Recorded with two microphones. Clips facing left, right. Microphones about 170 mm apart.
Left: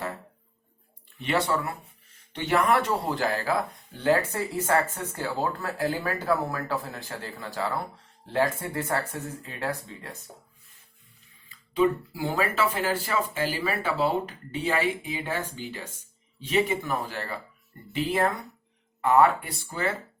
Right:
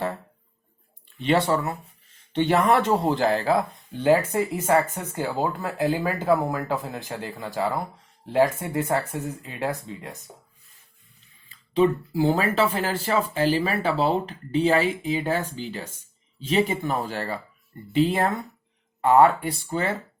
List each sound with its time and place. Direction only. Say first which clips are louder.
1.2 s speech: right 5 dB; 25° right (ahead or behind)
11.4 s speech: right 3 dB; 30° right (ahead or behind)